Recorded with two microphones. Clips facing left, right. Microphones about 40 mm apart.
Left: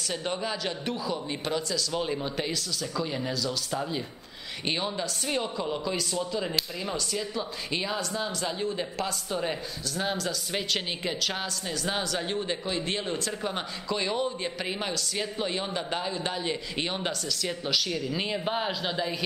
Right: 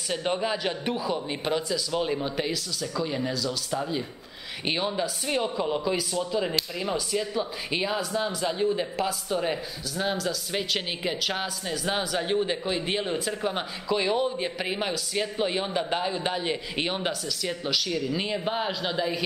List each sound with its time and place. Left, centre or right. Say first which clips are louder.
0.1 s speech: right 5 dB; centre